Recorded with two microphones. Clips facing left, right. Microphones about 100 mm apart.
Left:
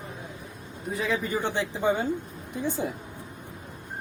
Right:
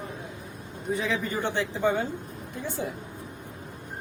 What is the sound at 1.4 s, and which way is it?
Speech, 15° left (ahead or behind).